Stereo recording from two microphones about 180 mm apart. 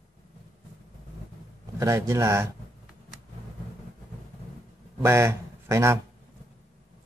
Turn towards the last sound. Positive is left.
turn(degrees=-15)  # may be behind; listen again after turning